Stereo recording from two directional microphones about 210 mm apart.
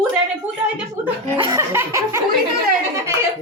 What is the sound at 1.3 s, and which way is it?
Speech, 15° right (ahead or behind).